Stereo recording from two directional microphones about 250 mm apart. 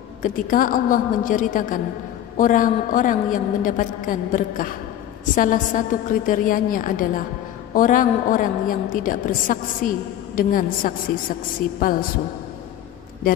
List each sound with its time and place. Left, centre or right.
0.2 s a woman's voice: left